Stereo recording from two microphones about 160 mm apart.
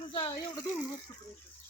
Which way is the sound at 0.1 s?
30° left (ahead or behind).